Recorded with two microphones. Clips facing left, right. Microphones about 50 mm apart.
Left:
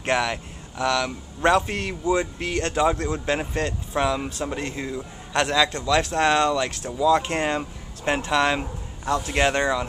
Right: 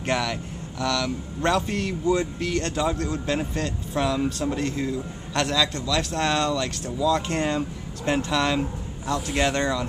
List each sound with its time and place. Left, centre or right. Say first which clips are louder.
0.0 s speech: left 2 dB; left